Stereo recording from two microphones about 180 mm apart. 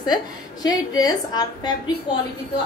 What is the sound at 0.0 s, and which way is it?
A woman's voice, 20° left (ahead or behind).